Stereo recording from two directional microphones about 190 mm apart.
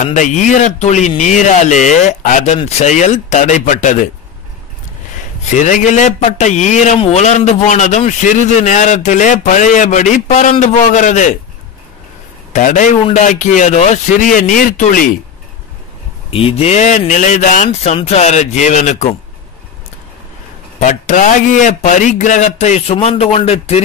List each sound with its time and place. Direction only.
0.0 s a man's voice: 40° left (ahead or behind)
5.5 s a man's voice: 40° left (ahead or behind)
12.5 s a man's voice: 40° left (ahead or behind)
16.3 s a man's voice: 30° left (ahead or behind)
20.8 s a man's voice: 40° left (ahead or behind)